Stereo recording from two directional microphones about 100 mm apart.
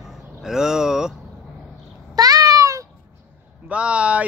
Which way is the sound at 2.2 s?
40° right (ahead or behind).